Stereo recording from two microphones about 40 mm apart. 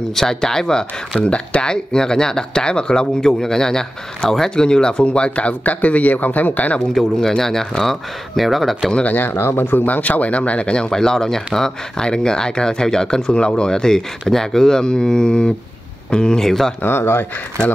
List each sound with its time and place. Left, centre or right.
0.1 s speech: centre
1.2 s speech: left
3.2 s speech: centre; by 6.8 s left
6.9 s speech: centre
9.1 s speech: left
9.8 s speech: left
10.9 s speech: centre
16.8 s speech: left